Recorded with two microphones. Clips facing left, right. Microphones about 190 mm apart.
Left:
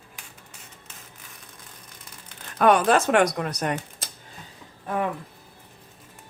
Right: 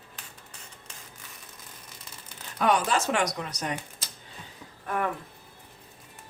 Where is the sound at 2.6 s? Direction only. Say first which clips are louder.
Left 6 dB; 55° left (ahead or behind).